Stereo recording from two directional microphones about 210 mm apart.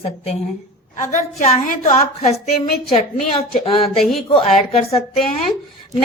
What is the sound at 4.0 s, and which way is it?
Speech, centre (ahead or behind).